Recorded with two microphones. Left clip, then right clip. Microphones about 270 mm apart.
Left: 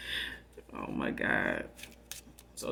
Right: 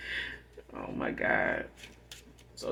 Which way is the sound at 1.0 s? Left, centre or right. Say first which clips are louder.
Right 2 dB; left.